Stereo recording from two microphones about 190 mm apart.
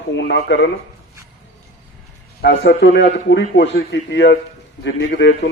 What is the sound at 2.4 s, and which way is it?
A man's voice, 65° left (ahead or behind).